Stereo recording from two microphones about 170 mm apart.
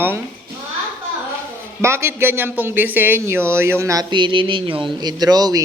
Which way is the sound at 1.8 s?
15° right (ahead or behind).